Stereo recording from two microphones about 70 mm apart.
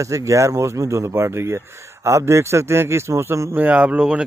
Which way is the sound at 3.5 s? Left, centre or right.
Right.